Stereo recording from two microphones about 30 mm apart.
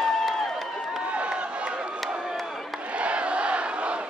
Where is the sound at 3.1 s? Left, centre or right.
Right.